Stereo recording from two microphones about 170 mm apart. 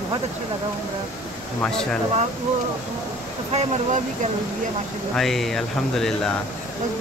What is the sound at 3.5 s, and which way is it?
Speech, 45° right (ahead or behind).